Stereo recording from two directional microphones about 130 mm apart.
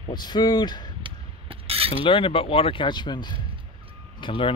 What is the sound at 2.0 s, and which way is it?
Speech, 40° left (ahead or behind).